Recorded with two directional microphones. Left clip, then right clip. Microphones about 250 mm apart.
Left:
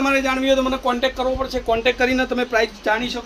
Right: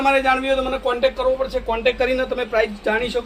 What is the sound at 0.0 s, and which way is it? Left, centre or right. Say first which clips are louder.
A man's voice: right 2 dB; left.